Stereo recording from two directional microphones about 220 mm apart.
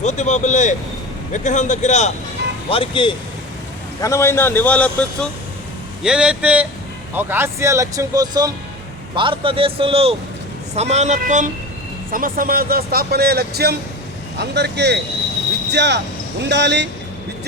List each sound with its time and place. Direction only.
0.0 s a man's voice: 30° left (ahead or behind)
4.0 s a man's voice: 10° left (ahead or behind); by 16.9 s 50° right (ahead or behind)